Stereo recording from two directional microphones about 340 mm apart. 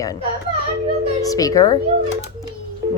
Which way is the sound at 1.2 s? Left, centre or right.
Centre.